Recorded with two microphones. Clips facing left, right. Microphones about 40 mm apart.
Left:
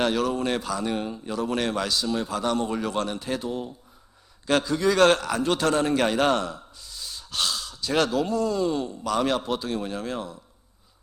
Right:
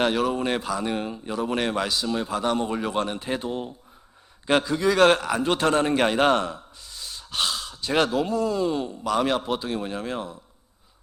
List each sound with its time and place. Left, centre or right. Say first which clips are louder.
0.0 s a man's voice: right 1 dB; centre
4.4 s a man's voice: right 1 dB; centre